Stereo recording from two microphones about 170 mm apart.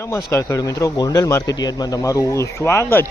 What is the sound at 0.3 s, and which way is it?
Speech, 15° left (ahead or behind).